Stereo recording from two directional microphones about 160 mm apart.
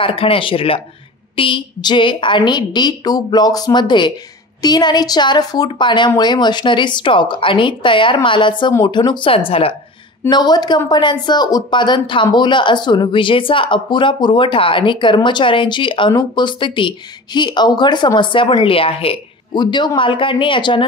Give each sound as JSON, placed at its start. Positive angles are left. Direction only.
{"t": 0.0, "sound": "a woman's voice", "side_deg": 35}
{"t": 10.3, "sound": "a woman's voice", "side_deg": 25}